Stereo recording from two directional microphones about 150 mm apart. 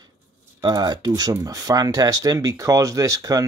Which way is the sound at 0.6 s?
25° right (ahead or behind).